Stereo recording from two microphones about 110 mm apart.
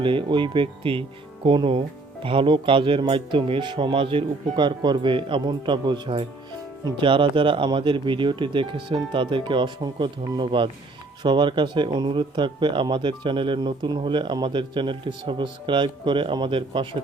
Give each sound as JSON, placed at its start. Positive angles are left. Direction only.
{"t": 0.0, "sound": "speech", "side_deg": -50}